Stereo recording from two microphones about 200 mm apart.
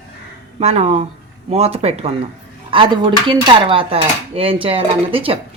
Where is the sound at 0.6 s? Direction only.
35° right (ahead or behind).